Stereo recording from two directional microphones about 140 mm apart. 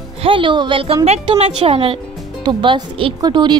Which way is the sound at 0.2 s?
40° right (ahead or behind).